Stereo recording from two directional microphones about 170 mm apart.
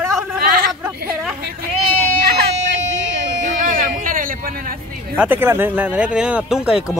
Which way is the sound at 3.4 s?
50° right (ahead or behind).